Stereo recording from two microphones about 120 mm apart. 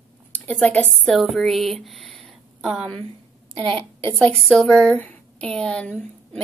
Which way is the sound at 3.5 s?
45° right (ahead or behind).